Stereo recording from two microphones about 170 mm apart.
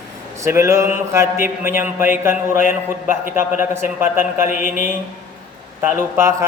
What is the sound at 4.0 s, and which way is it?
Speech, 15° right (ahead or behind).